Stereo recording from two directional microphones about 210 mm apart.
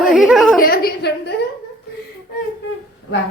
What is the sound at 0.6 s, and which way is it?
Speech, 45° left (ahead or behind).